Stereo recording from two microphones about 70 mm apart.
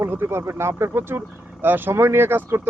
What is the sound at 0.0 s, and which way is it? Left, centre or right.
Speech, right.